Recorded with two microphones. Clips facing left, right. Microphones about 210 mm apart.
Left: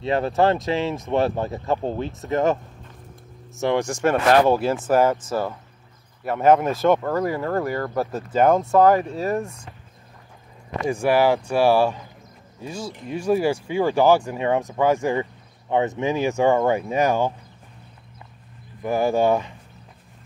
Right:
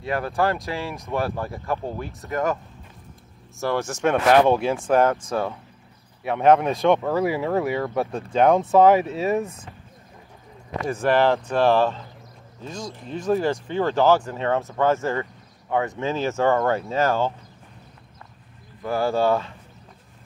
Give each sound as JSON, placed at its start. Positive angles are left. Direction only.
{"t": 0.0, "sound": "speech", "side_deg": 25}
{"t": 3.6, "sound": "speech", "side_deg": 15}
{"t": 10.9, "sound": "speech", "side_deg": 10}
{"t": 18.8, "sound": "speech", "side_deg": 15}